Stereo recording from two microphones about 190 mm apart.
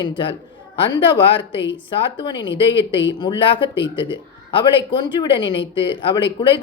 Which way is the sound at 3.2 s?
25° left (ahead or behind).